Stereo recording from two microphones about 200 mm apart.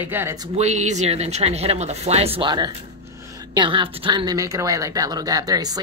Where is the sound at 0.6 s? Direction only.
35° right (ahead or behind).